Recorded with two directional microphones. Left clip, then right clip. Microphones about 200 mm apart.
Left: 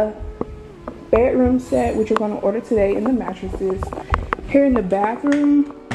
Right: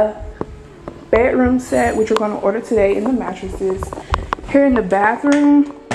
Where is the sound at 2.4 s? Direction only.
5° left (ahead or behind).